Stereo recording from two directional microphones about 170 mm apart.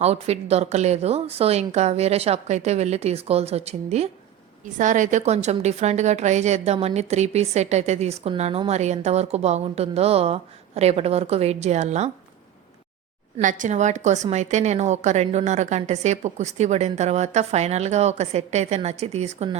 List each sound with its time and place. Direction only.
0.0 s a woman's voice: 40° right (ahead or behind)
13.4 s a woman's voice: 50° right (ahead or behind)